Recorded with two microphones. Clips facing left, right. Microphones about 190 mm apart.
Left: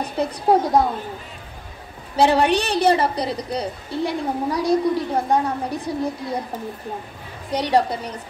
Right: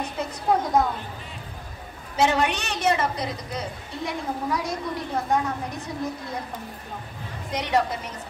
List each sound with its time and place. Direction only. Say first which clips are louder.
0.0 s a sound: left 6 dB; 35° left (ahead or behind)
2.1 s a woman's voice: left 6 dB; 35° left (ahead or behind)
7.5 s a woman's voice: left 5 dB; 35° left (ahead or behind)